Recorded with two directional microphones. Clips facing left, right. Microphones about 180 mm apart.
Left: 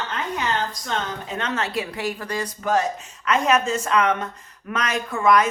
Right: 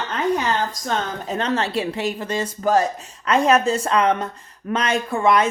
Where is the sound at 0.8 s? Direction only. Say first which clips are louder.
Right 3 dB; 40° right (ahead or behind).